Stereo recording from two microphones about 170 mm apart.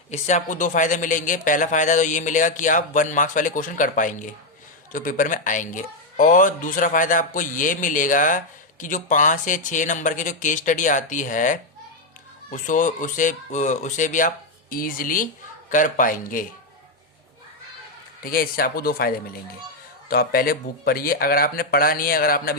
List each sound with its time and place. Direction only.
0.1 s speech: 45° left (ahead or behind)
18.2 s speech: 60° left (ahead or behind)